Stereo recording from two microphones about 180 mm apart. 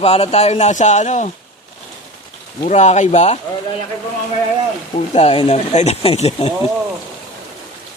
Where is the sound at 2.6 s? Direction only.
40° left (ahead or behind).